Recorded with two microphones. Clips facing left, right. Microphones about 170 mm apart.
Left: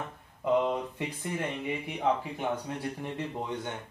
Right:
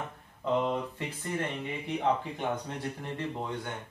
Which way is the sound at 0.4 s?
15° left (ahead or behind).